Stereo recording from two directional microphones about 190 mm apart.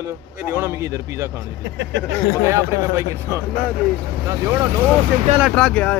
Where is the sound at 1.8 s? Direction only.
65° right (ahead or behind).